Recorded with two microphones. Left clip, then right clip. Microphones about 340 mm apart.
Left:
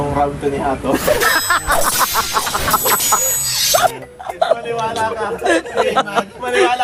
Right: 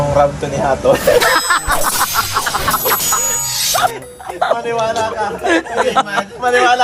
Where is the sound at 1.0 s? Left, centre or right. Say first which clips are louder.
Right 3 dB; centre.